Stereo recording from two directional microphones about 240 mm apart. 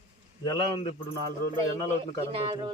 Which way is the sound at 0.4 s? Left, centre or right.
Centre.